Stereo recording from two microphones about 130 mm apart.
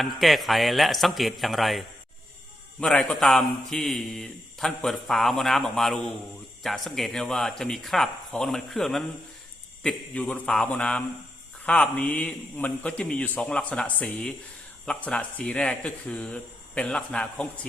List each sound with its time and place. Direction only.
0.0 s a man's voice: centre (ahead or behind)
2.8 s a man's voice: 5° left (ahead or behind)